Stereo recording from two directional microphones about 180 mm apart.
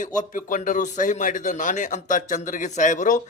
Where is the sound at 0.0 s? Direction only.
45° left (ahead or behind).